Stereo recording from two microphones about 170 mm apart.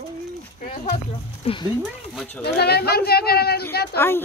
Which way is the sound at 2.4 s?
70° left (ahead or behind).